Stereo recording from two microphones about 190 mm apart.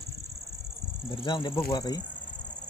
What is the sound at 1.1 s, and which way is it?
Speech, 25° left (ahead or behind).